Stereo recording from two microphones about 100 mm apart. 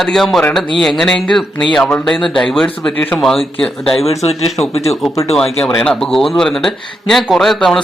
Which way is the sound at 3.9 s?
90° left.